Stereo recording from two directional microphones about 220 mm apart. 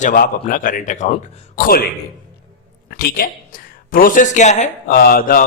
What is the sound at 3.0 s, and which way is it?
Speech, 40° left (ahead or behind).